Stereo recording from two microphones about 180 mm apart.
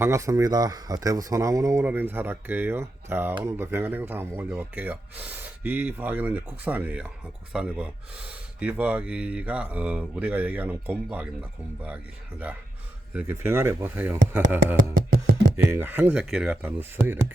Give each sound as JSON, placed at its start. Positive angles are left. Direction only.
{"t": 0.0, "sound": "speech", "side_deg": -15}
{"t": 13.1, "sound": "speech", "side_deg": -15}
{"t": 14.9, "sound": "music", "side_deg": -55}
{"t": 15.5, "sound": "speech", "side_deg": -10}